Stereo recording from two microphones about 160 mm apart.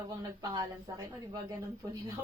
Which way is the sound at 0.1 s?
25° right (ahead or behind).